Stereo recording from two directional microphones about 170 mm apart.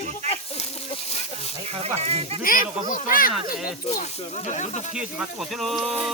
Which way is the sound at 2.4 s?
55° left (ahead or behind).